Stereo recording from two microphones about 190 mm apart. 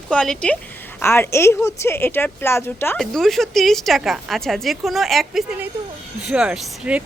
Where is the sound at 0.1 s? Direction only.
5° left (ahead or behind).